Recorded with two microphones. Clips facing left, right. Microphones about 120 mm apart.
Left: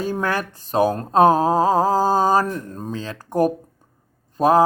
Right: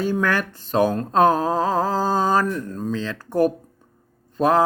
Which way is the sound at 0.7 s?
40° left (ahead or behind).